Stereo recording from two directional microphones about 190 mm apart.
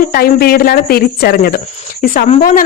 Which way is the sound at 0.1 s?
50° left (ahead or behind).